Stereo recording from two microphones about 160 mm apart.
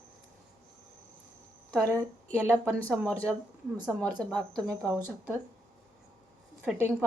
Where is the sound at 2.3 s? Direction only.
10° left (ahead or behind).